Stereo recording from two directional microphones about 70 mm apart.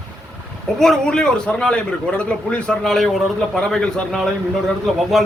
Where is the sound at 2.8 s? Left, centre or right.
Centre.